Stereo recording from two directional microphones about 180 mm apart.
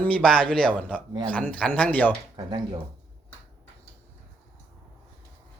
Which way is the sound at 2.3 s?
25° right (ahead or behind).